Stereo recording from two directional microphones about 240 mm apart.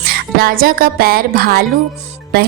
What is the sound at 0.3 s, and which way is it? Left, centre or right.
A woman's voice, right.